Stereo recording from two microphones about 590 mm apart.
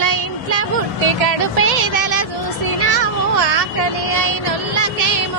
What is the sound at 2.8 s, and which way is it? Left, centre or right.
Vehicle, right.